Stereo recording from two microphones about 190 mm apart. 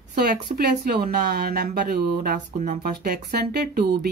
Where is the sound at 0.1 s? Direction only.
55° right (ahead or behind).